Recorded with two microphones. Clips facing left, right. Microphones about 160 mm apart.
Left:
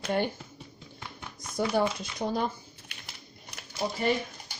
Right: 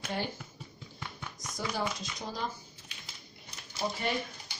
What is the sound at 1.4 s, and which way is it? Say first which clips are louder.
Speech: left 8 dB; 55° left (ahead or behind).